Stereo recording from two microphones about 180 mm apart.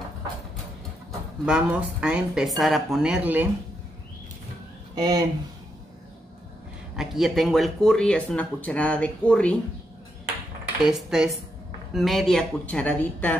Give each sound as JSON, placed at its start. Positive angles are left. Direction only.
{"t": 1.4, "sound": "speech", "side_deg": -5}
{"t": 4.9, "sound": "speech", "side_deg": -20}
{"t": 7.0, "sound": "speech", "side_deg": 0}
{"t": 10.8, "sound": "speech", "side_deg": 0}